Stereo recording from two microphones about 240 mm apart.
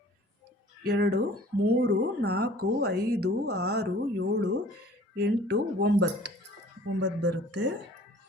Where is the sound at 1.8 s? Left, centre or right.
Right.